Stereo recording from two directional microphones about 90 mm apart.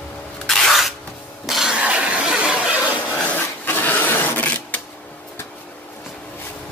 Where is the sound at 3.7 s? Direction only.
20° left (ahead or behind).